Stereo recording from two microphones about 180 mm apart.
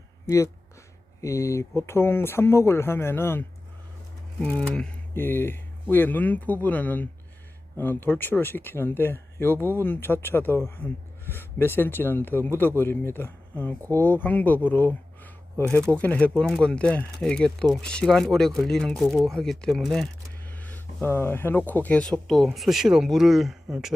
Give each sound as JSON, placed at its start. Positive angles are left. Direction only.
{"t": 0.3, "sound": "speech", "side_deg": 15}
{"t": 9.6, "sound": "speech", "side_deg": -15}
{"t": 9.8, "sound": "speech", "side_deg": 10}